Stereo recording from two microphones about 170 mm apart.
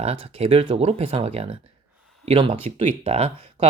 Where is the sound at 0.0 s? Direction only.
35° right (ahead or behind).